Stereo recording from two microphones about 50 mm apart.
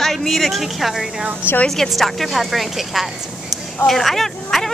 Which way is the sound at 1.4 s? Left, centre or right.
Right.